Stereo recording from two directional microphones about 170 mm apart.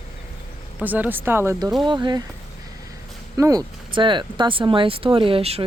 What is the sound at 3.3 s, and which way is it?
Speech, 20° right (ahead or behind).